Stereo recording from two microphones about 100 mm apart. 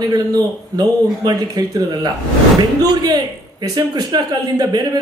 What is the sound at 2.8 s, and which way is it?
A man's voice, 40° right (ahead or behind).